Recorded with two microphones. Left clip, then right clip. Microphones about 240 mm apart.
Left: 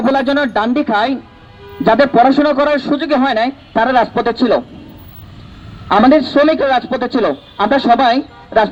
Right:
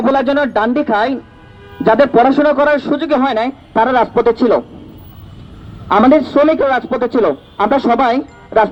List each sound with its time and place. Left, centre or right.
0.0 s a man's voice: left
5.9 s a man's voice: left